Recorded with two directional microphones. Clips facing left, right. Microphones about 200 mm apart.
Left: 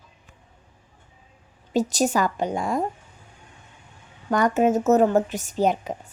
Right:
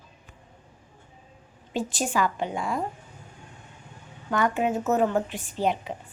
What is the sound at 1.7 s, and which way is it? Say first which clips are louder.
Speech: left 6 dB; 40° left (ahead or behind).